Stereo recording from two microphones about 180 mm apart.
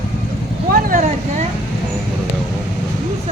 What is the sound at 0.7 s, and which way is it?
Vehicle, 50° right (ahead or behind).